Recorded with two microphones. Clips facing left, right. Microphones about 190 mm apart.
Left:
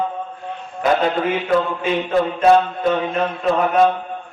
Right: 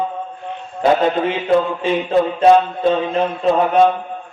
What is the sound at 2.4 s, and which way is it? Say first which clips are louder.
Mantra: right 2 dB; 30° right (ahead or behind).